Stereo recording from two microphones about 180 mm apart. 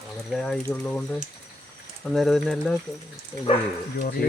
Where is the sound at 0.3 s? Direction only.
Centre (ahead or behind).